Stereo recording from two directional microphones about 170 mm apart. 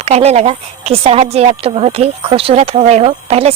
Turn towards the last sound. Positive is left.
turn(degrees=-35)  # may be behind; listen again after turning